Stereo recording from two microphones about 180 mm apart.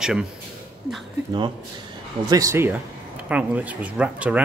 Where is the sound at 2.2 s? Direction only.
20° right (ahead or behind).